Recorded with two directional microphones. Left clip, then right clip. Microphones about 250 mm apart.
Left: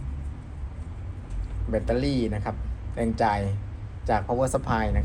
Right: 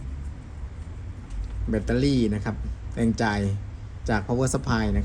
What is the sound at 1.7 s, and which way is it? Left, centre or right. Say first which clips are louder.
Speech: right 1 dB; right.